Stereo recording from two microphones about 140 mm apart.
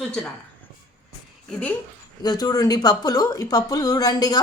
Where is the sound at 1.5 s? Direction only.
5° left (ahead or behind).